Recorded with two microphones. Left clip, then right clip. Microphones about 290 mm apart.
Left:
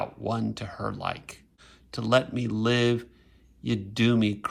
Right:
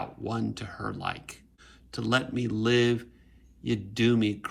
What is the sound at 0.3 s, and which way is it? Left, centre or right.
Speech, centre.